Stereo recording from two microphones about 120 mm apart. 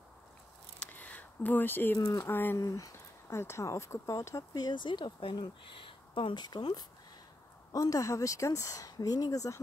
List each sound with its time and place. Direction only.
0.7 s a sound: 15° left (ahead or behind)
2.0 s speech: 30° left (ahead or behind)
2.3 s speech: 15° left (ahead or behind)
2.6 s speech: 25° left (ahead or behind)